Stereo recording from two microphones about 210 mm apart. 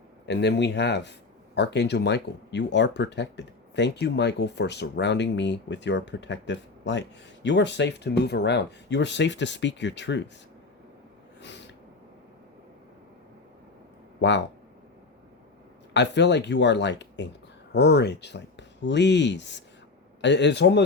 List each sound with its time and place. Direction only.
0.3 s speech: 55° left (ahead or behind)
11.3 s snort: 55° left (ahead or behind)
14.2 s speech: 55° left (ahead or behind)
15.9 s speech: 55° left (ahead or behind)